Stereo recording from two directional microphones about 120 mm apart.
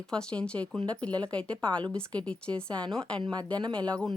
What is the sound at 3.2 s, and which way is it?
Speech, 40° right (ahead or behind).